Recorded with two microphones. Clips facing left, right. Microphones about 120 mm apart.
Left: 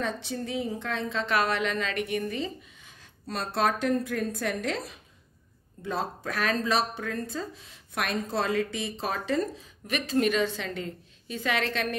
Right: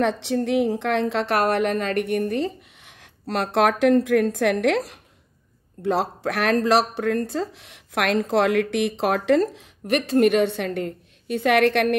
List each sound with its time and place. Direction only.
0.0 s speech: 80° right